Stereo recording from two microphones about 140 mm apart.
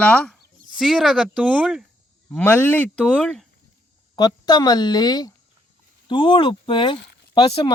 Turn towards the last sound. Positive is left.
turn(degrees=45)  # may be behind; listen again after turning